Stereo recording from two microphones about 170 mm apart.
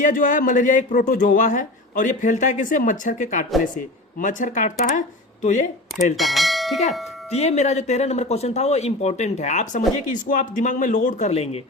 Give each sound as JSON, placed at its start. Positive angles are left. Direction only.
{"t": 0.0, "sound": "speech", "side_deg": 50}
{"t": 6.1, "sound": "bell", "side_deg": 0}
{"t": 7.3, "sound": "speech", "side_deg": 40}